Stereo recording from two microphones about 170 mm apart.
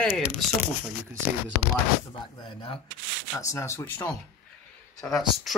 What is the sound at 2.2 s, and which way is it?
Speech, 30° left (ahead or behind).